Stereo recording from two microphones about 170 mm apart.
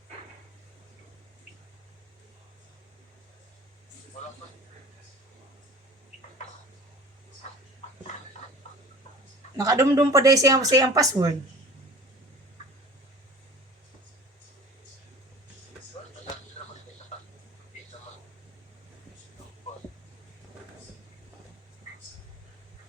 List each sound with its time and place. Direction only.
9.6 s speech: 20° right (ahead or behind)